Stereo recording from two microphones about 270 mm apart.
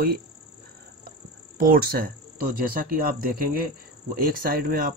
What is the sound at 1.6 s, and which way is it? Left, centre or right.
Speech, right.